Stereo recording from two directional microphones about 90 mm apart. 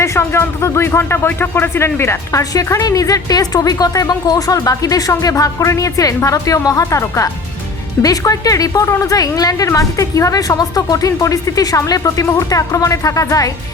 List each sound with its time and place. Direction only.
0.0 s speech: 30° left (ahead or behind)
2.4 s a woman's voice: 40° left (ahead or behind)